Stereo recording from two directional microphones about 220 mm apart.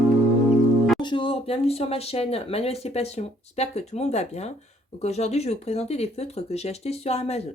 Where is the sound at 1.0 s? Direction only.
20° left (ahead or behind).